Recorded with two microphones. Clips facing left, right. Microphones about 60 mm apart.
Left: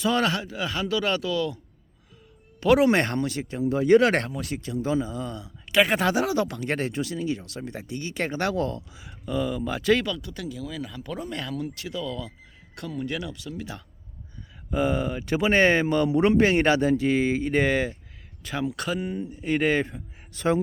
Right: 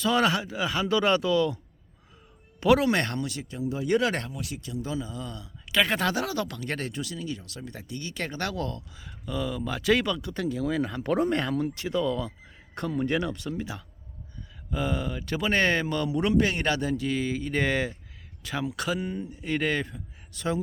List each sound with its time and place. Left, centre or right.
0.1 s speech: centre; by 1.5 s right
2.8 s speech: left
3.6 s speech: left
5.7 s speech: centre
6.3 s speech: left
8.9 s speech: centre
10.0 s speech: right
14.7 s speech: centre
17.6 s speech: centre
19.8 s speech: left